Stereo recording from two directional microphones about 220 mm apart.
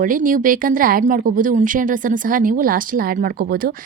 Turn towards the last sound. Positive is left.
turn(degrees=-40)  # may be behind; listen again after turning